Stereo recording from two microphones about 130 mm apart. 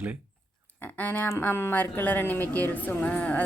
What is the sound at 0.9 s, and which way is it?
Speech, 10° left (ahead or behind).